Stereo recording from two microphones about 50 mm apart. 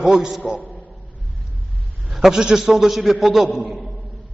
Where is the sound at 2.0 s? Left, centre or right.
Centre.